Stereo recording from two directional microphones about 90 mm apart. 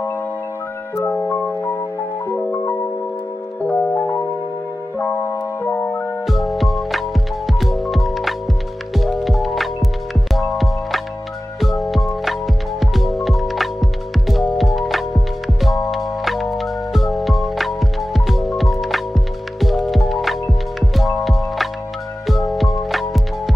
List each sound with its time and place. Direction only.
3.6 s music: 15° left (ahead or behind)
6.2 s music: centre (ahead or behind)